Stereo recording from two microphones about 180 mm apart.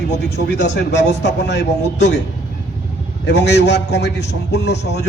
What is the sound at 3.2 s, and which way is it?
A man's voice, 70° left (ahead or behind).